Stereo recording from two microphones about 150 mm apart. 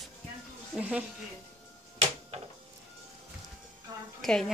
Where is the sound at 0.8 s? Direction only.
10° right (ahead or behind).